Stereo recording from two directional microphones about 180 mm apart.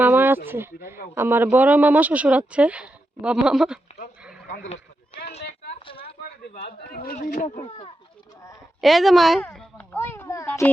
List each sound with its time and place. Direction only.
0.0 s a sound: 10° right (ahead or behind)
1.1 s speech: 10° right (ahead or behind)
4.4 s speech: 65° left (ahead or behind)
5.1 s a sound: 35° left (ahead or behind)
6.5 s speech: 55° left (ahead or behind)
8.8 s a child's voice: centre (ahead or behind); by 10.7 s 15° left (ahead or behind)